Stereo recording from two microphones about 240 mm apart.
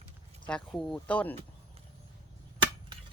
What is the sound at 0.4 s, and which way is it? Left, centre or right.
Speech, centre.